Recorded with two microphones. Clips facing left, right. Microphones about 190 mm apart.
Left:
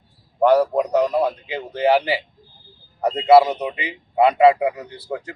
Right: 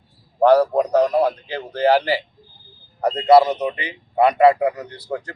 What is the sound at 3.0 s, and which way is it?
A man's voice, 5° left (ahead or behind).